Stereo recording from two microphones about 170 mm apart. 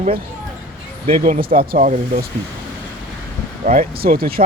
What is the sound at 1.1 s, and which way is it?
Speech, 60° right (ahead or behind).